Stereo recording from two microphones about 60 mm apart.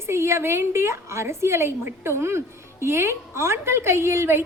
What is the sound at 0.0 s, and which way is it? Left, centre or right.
A woman's voice, right.